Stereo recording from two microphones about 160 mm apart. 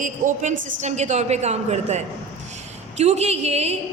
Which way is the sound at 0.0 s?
50° right (ahead or behind).